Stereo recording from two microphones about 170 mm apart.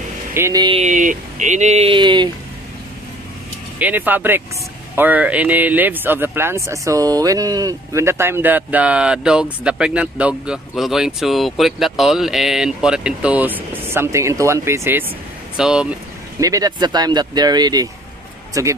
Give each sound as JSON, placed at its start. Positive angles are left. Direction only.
{"t": 0.3, "sound": "speech", "side_deg": -15}
{"t": 0.7, "sound": "speech", "side_deg": -45}
{"t": 2.0, "sound": "speech", "side_deg": -25}
{"t": 3.8, "sound": "speech", "side_deg": -10}
{"t": 16.3, "sound": "speech", "side_deg": -20}